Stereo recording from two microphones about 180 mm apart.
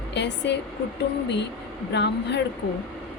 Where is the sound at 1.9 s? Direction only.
70° left (ahead or behind).